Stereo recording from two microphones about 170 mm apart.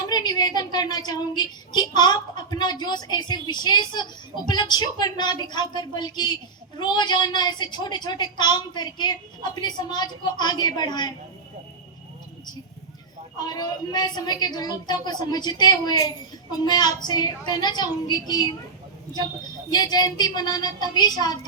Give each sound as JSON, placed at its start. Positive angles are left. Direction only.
{"t": 0.1, "sound": "a woman's voice", "side_deg": 25}
{"t": 13.4, "sound": "a woman's voice", "side_deg": 25}
{"t": 19.7, "sound": "a woman's voice", "side_deg": 25}